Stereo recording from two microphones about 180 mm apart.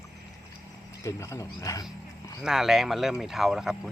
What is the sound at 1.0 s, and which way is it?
Speech, 15° left (ahead or behind).